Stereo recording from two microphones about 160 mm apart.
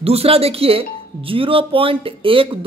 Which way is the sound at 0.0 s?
40° right (ahead or behind).